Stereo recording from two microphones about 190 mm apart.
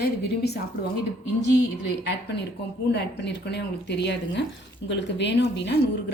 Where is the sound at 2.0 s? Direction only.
65° left (ahead or behind).